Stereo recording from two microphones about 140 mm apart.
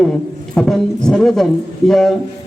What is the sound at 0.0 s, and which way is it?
A man's voice, 5° left (ahead or behind).